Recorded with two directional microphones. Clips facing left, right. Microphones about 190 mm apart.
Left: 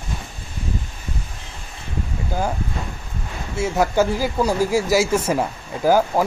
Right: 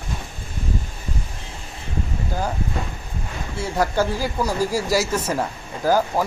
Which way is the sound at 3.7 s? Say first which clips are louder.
Left 2 dB; 5° left (ahead or behind).